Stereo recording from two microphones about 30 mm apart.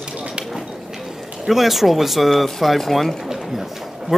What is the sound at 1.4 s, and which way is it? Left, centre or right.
Speech, centre.